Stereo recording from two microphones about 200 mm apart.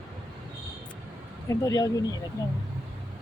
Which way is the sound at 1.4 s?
15° left (ahead or behind).